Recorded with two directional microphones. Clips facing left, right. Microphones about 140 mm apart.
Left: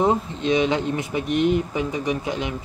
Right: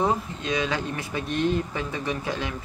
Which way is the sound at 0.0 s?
25° left (ahead or behind).